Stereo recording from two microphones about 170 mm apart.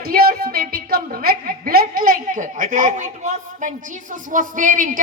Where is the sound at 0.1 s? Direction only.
60° right (ahead or behind).